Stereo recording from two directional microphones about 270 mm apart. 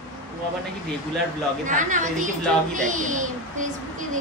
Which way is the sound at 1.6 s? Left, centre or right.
Right.